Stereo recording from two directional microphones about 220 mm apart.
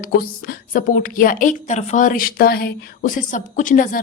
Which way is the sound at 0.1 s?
40° left (ahead or behind).